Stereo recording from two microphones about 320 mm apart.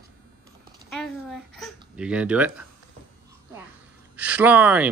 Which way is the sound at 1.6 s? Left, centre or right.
Centre.